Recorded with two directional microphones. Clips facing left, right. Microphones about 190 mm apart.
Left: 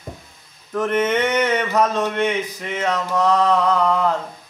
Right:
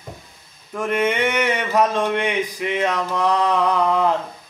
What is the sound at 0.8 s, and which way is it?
Mantra, 10° right (ahead or behind).